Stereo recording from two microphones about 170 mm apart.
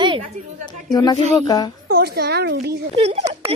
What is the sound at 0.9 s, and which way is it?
Speech, 25° left (ahead or behind).